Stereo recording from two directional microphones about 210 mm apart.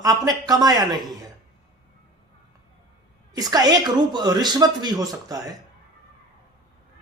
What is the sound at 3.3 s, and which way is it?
Speech, 20° right (ahead or behind).